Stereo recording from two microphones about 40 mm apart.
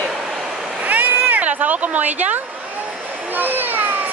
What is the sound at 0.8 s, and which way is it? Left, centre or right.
Cat, right.